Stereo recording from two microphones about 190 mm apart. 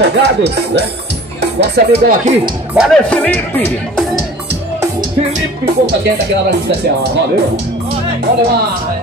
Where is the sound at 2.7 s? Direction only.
5° left (ahead or behind).